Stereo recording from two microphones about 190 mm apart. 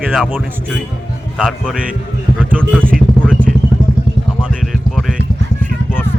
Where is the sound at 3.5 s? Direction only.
Centre (ahead or behind).